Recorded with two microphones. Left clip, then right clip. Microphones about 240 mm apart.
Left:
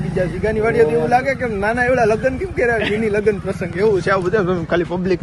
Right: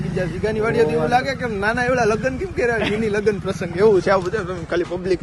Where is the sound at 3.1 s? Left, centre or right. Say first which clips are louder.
Left 2 dB; centre.